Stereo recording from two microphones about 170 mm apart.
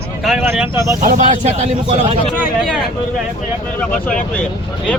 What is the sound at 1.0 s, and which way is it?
Speech, 45° right (ahead or behind).